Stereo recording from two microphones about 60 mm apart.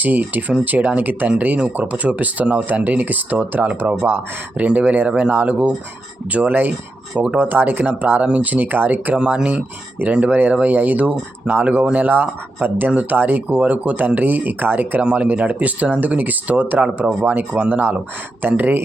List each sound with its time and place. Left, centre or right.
0.0 s speech: right
9.1 s speech: centre
15.0 s speech: right